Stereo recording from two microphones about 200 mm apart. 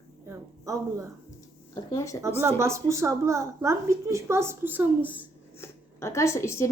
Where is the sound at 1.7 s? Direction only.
15° left (ahead or behind).